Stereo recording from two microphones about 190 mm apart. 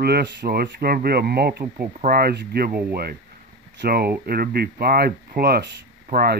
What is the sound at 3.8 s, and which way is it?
Speech, 55° right (ahead or behind).